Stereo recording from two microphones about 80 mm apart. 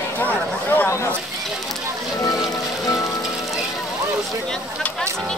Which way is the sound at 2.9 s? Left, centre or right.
Left.